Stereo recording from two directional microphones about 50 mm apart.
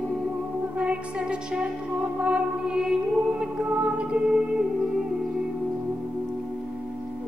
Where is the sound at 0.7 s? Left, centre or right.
Right.